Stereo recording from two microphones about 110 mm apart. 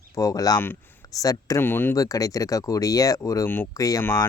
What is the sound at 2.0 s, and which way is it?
Speech, 35° left (ahead or behind).